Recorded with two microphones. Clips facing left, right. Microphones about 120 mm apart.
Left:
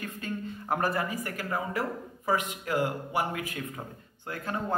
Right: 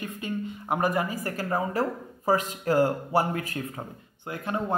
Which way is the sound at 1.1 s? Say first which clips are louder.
Right 4 dB; 35° right (ahead or behind).